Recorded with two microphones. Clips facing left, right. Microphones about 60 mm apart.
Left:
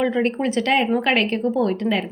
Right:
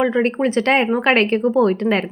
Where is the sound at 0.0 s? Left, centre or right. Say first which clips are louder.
Right 3 dB; right.